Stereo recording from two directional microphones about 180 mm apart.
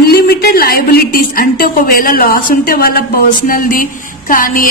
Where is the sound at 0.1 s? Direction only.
60° left (ahead or behind).